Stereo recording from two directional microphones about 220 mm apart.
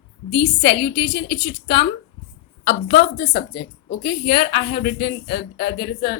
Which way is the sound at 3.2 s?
45° left (ahead or behind).